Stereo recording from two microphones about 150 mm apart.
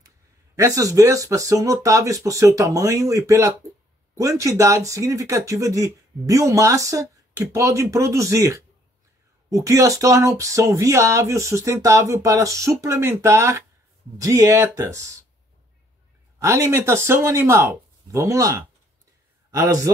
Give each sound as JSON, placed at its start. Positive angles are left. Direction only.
{"t": 0.6, "sound": "speech", "side_deg": -20}
{"t": 16.3, "sound": "speech", "side_deg": -20}